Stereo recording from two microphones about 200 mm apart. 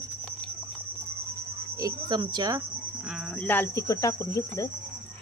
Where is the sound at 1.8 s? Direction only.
20° right (ahead or behind).